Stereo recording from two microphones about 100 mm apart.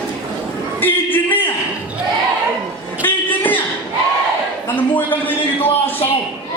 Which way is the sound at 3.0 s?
20° left (ahead or behind).